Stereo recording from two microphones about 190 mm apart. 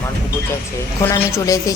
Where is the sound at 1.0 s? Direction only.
15° left (ahead or behind).